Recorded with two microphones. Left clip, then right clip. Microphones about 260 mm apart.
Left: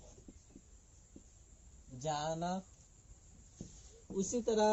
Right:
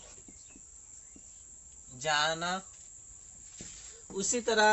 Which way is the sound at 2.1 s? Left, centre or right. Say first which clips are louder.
Right 8 dB; right.